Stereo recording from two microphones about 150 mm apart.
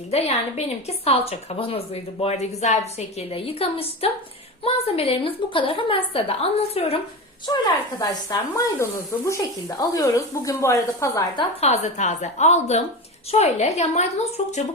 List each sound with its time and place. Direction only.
0.1 s a woman's voice: 45° left (ahead or behind)
7.4 s speech: 30° left (ahead or behind)
11.6 s speech: 50° left (ahead or behind)